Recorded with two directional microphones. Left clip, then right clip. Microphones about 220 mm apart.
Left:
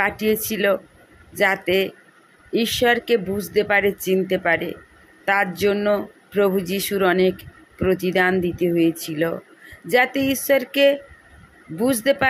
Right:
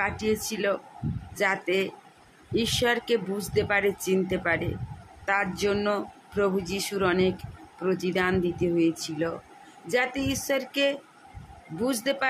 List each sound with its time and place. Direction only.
0.0 s speech: 20° left (ahead or behind)